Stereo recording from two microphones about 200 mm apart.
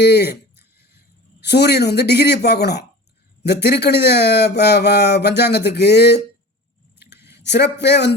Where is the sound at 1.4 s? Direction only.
55° left (ahead or behind).